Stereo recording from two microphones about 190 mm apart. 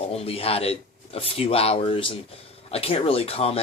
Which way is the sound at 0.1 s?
30° left (ahead or behind).